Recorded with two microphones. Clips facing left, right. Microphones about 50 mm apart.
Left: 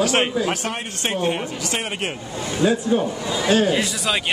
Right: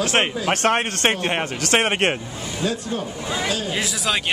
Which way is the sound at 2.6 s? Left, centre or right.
Centre.